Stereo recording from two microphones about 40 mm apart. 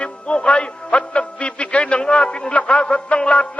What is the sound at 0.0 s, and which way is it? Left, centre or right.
Music, left.